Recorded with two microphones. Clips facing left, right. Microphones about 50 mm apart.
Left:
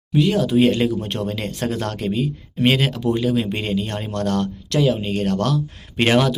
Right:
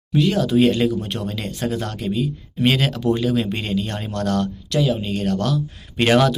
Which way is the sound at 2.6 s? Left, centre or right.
Left.